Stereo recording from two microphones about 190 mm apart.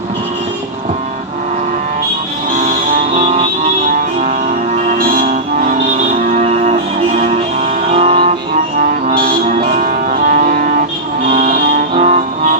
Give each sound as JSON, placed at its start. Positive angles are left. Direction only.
{"t": 2.9, "sound": "music", "side_deg": -35}
{"t": 4.9, "sound": "music", "side_deg": -45}
{"t": 7.9, "sound": "music", "side_deg": -30}
{"t": 8.8, "sound": "music", "side_deg": -45}